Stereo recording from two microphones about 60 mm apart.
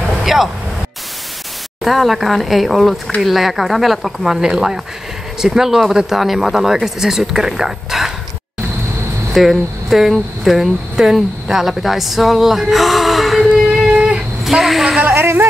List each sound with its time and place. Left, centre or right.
0.2 s vehicle: centre
1.8 s speech: centre
9.3 s speech: centre
13.7 s a sound: centre
14.4 s a sound: centre
15.1 s speech: right